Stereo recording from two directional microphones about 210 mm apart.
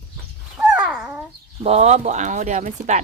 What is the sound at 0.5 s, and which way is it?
Babbling, 5° right (ahead or behind).